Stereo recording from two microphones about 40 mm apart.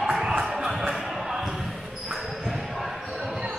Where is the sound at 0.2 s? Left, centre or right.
Centre.